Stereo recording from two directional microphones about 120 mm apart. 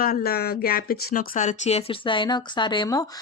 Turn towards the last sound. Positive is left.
turn(degrees=35)  # may be behind; listen again after turning